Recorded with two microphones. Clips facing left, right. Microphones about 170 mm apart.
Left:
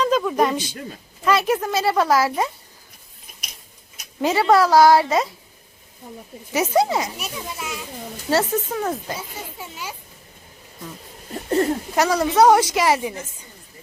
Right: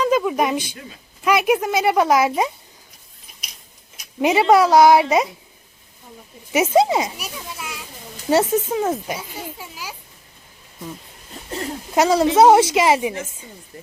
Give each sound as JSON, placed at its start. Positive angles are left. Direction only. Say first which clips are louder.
{"t": 0.0, "sound": "a sound", "louder": "right 1 dB", "side_deg": -10}
{"t": 1.2, "sound": "speech", "louder": "right 2 dB", "side_deg": -15}
{"t": 4.2, "sound": "a woman's voice", "louder": "right 2 dB", "side_deg": -20}
{"t": 6.5, "sound": "a woman's voice", "louder": "right 3 dB", "side_deg": -20}
{"t": 7.2, "sound": "a child's voice", "louder": "left 2 dB", "side_deg": 0}
{"t": 8.3, "sound": "a woman's voice", "louder": "right 3 dB", "side_deg": -20}
{"t": 9.6, "sound": "a child's voice", "louder": "left 1 dB", "side_deg": -5}
{"t": 11.9, "sound": "a woman's voice", "louder": "right 3 dB", "side_deg": -25}